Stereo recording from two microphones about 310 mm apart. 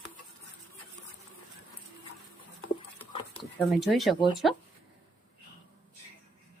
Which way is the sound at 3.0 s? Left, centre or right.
Centre.